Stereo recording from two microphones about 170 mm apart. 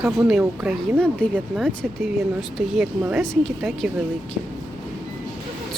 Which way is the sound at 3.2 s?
Centre (ahead or behind).